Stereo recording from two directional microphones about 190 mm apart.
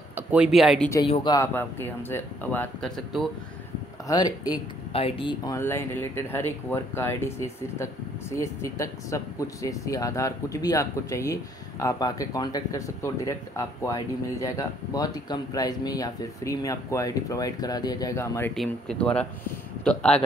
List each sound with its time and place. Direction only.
0.1 s speech: 5° right (ahead or behind)
1.0 s speech: 25° left (ahead or behind); by 3.3 s centre (ahead or behind)
4.1 s speech: 20° left (ahead or behind)
5.6 s speech: 10° left (ahead or behind)
18.5 s speech: 5° left (ahead or behind)